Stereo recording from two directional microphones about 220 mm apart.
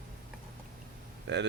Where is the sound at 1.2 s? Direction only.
55° right (ahead or behind).